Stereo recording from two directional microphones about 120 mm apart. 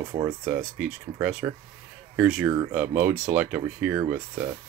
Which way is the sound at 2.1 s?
5° right (ahead or behind).